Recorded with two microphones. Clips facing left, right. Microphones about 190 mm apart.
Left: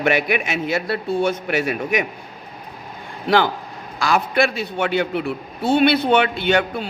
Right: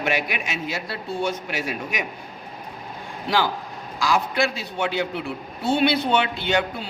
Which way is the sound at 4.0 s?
60° left (ahead or behind).